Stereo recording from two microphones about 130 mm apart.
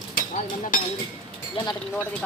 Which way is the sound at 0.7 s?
90° left.